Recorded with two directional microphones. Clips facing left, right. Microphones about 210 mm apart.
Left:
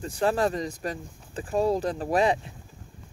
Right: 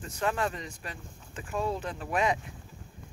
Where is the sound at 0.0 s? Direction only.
35° left (ahead or behind).